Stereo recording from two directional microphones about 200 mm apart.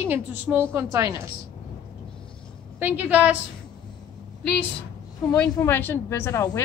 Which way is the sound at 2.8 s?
10° right (ahead or behind).